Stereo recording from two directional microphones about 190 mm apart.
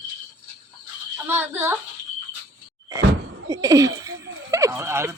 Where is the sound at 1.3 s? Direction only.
10° right (ahead or behind).